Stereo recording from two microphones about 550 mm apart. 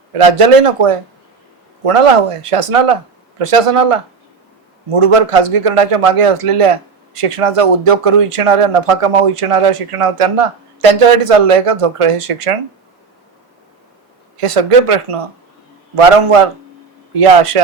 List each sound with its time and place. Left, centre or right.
0.1 s a man's voice: right
14.3 s a man's voice: right